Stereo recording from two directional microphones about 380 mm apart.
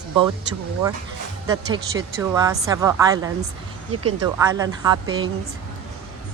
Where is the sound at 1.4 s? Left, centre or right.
Centre.